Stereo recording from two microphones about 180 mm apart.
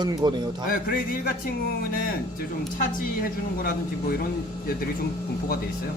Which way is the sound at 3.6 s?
55° left (ahead or behind).